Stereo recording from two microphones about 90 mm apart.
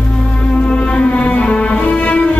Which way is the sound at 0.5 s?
10° left (ahead or behind).